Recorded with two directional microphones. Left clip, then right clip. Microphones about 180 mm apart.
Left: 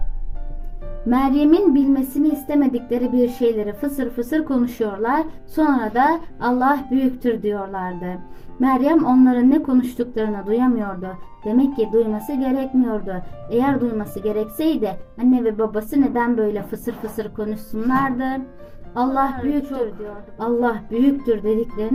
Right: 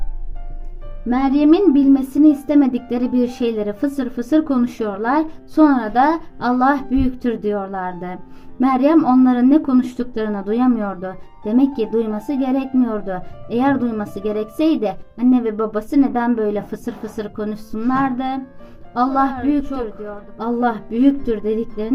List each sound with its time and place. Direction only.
1.1 s speech: centre (ahead or behind)
1.9 s a woman's voice: 25° right (ahead or behind)